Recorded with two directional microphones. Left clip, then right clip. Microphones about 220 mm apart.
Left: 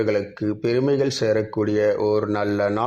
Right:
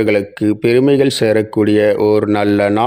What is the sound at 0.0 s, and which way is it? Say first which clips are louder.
Speech: right 8 dB; 35° right (ahead or behind).